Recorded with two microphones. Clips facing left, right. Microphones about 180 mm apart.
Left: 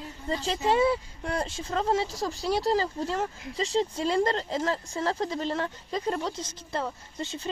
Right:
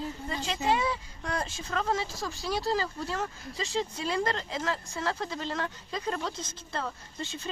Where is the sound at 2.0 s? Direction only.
35° left (ahead or behind).